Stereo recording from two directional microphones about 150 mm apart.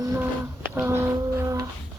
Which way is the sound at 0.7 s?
15° right (ahead or behind).